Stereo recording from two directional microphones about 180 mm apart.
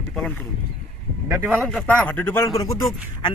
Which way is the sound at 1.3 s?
10° right (ahead or behind).